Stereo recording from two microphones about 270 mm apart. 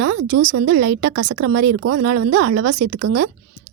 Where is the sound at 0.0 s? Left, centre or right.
Right.